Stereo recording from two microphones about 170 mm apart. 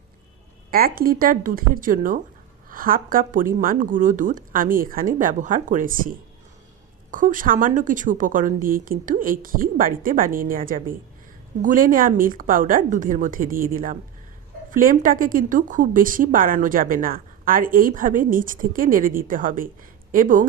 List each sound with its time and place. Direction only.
0.7 s speech: 60° right (ahead or behind)